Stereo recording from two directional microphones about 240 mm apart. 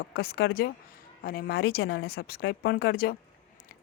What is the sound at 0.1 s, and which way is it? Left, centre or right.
Speech, left.